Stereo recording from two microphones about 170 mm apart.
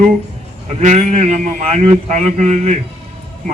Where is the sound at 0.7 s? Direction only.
40° right (ahead or behind).